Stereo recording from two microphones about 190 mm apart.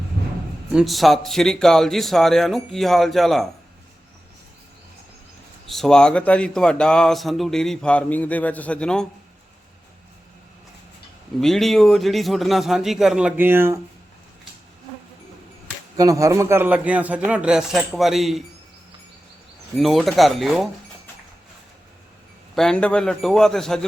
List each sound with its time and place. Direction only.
0.7 s speech: centre (ahead or behind)
5.6 s speech: centre (ahead or behind)
11.3 s speech: centre (ahead or behind)
16.0 s a man's voice: 15° right (ahead or behind); by 18.4 s centre (ahead or behind)
19.7 s speech: centre (ahead or behind)
22.5 s speech: 5° left (ahead or behind)